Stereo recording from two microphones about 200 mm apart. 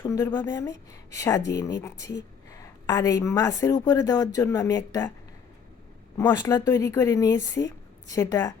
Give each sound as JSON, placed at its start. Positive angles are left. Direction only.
{"t": 0.0, "sound": "a woman's voice", "side_deg": 15}
{"t": 6.1, "sound": "a woman's voice", "side_deg": 20}